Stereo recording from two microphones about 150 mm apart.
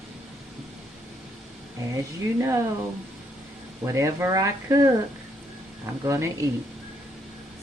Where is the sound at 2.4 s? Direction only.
20° right (ahead or behind).